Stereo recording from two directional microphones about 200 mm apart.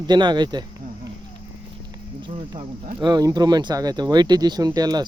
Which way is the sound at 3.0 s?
20° right (ahead or behind).